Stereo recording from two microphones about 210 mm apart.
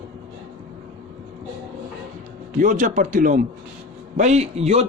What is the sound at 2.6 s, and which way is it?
Speech, 40° right (ahead or behind).